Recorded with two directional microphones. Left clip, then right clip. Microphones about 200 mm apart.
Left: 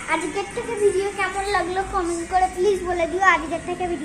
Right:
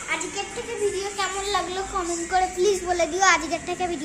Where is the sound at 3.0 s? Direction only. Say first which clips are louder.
Left 2 dB; 20° right (ahead or behind).